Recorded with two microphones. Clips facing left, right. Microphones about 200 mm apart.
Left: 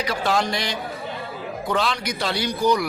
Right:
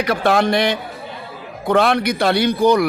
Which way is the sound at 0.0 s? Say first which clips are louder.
Right 6 dB; 55° right (ahead or behind).